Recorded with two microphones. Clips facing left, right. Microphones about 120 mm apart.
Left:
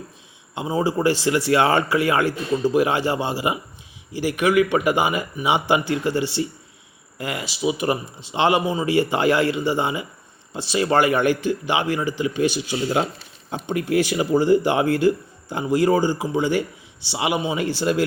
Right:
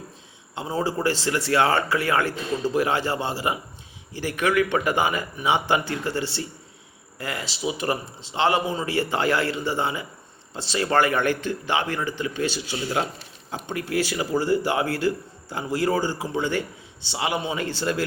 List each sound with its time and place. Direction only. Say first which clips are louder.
0.5 s a man's voice: left 4 dB; 15° left (ahead or behind)